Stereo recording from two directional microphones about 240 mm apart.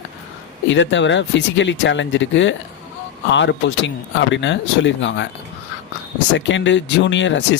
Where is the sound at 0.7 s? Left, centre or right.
Left.